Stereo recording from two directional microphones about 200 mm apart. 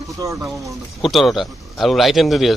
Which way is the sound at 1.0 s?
Centre (ahead or behind).